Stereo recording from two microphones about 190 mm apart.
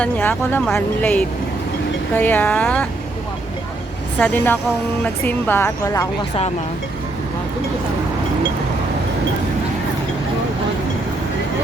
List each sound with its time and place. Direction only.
0.0 s speech: 10° left (ahead or behind)
4.2 s speech: 10° left (ahead or behind)